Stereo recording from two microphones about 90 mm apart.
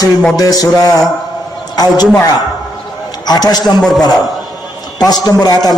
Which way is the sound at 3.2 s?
45° left (ahead or behind).